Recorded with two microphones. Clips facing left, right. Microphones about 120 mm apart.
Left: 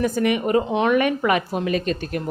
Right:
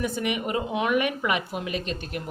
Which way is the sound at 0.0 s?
45° left (ahead or behind).